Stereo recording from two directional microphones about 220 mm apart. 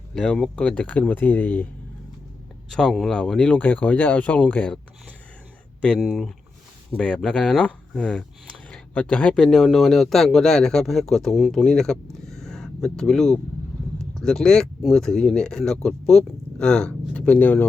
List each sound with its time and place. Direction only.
0.1 s speech: centre (ahead or behind)
2.6 s speech: centre (ahead or behind)
5.8 s speech: 5° left (ahead or behind)